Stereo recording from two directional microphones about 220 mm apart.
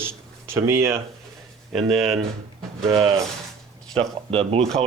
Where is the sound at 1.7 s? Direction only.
Centre (ahead or behind).